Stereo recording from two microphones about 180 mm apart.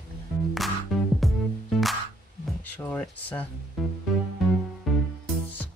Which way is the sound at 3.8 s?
Centre (ahead or behind).